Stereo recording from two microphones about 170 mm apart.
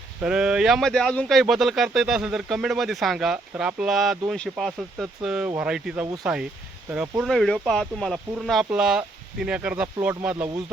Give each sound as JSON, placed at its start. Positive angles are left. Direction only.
{"t": 0.2, "sound": "speech", "side_deg": -5}
{"t": 7.2, "sound": "speech", "side_deg": 0}